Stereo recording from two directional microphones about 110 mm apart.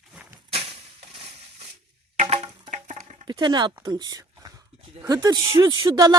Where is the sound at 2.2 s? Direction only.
90° right.